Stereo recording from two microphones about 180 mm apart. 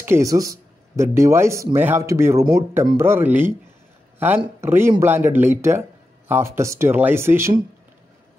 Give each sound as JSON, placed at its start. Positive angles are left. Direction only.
{"t": 0.0, "sound": "speech", "side_deg": -15}
{"t": 4.6, "sound": "speech", "side_deg": -15}